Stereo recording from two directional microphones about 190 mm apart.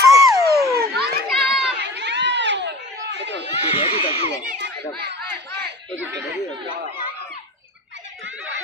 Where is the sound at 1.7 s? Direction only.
65° right (ahead or behind).